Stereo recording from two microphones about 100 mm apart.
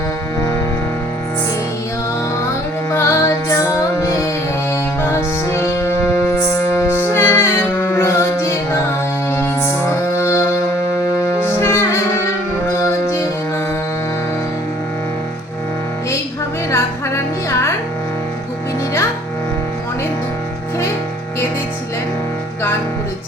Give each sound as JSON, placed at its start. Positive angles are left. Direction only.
{"t": 2.9, "sound": "music", "side_deg": 25}
{"t": 6.8, "sound": "music", "side_deg": 25}
{"t": 11.6, "sound": "music", "side_deg": 25}